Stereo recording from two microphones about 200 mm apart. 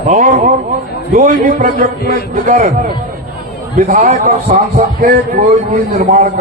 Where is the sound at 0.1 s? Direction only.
40° right (ahead or behind).